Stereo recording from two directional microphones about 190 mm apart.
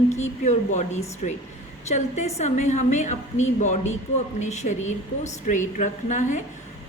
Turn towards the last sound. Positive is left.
turn(degrees=40)  # may be behind; listen again after turning